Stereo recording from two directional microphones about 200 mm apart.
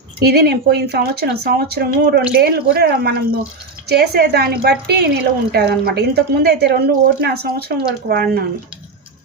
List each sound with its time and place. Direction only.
0.2 s a woman's voice: 55° right (ahead or behind)